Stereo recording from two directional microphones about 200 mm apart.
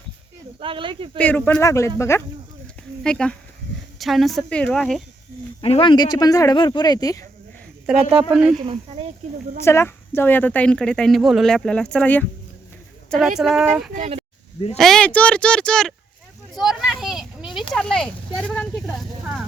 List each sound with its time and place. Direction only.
0.6 s speech: 25° right (ahead or behind)
1.2 s speech: 10° left (ahead or behind)
5.6 s speech: 25° left (ahead or behind)
7.9 s speech: centre (ahead or behind)
8.5 s speech: 25° right (ahead or behind)
9.6 s speech: 10° left (ahead or behind); by 13.9 s 5° right (ahead or behind)
13.9 s speech: 35° right (ahead or behind)
14.8 s speech: centre (ahead or behind)
16.6 s a sound: 5° right (ahead or behind)